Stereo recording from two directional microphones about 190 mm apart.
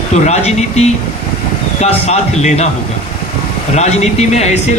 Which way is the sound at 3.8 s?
35° left (ahead or behind).